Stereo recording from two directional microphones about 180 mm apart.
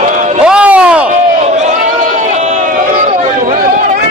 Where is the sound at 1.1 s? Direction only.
40° right (ahead or behind).